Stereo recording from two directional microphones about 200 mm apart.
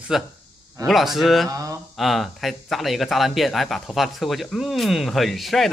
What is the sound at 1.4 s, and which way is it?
Speech, 15° right (ahead or behind).